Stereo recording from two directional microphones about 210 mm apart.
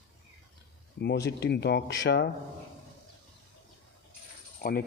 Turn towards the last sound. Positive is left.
turn(degrees=45)  # may be behind; listen again after turning